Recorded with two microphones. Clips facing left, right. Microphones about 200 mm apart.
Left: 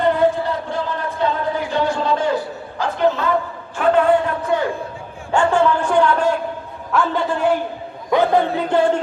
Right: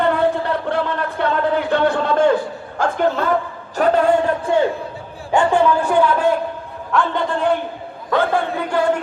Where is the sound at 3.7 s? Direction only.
40° right (ahead or behind).